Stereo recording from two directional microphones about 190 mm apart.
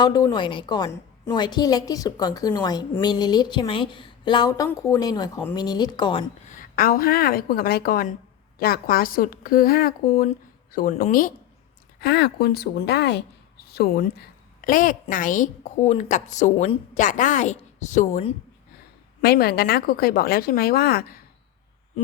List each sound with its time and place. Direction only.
0.0 s a woman's voice: 20° left (ahead or behind)
6.5 s a woman's voice: 45° left (ahead or behind)
11.9 s a woman's voice: 55° left (ahead or behind); by 18.3 s 35° left (ahead or behind)
19.2 s a woman's voice: 55° left (ahead or behind)